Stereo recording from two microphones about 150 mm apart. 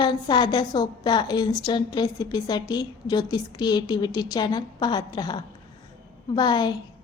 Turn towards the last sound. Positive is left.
turn(degrees=30)  # may be behind; listen again after turning